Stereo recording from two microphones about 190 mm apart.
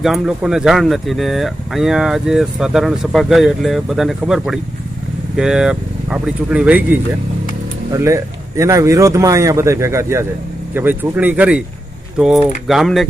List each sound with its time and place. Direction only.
0.0 s speech: centre (ahead or behind)
7.9 s speech: 15° right (ahead or behind); by 13.1 s centre (ahead or behind)